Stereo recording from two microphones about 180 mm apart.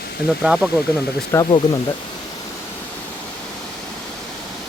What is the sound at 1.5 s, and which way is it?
Speech, 25° left (ahead or behind).